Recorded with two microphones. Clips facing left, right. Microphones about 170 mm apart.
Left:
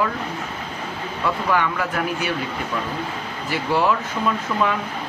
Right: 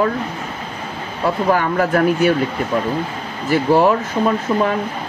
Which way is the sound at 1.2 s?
45° right (ahead or behind).